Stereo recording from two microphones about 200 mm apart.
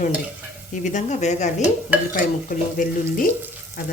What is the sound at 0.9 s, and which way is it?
Speech, 35° left (ahead or behind).